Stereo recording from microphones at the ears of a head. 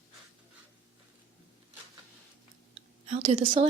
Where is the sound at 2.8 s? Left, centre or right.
Right.